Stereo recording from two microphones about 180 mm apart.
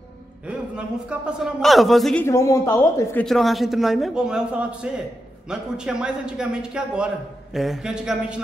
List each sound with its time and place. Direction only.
0.5 s a man's voice: 5° right (ahead or behind)
2.2 s speech: 15° left (ahead or behind)
3.3 s a man's voice: centre (ahead or behind)